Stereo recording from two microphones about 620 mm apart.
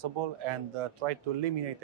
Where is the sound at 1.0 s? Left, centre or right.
Right.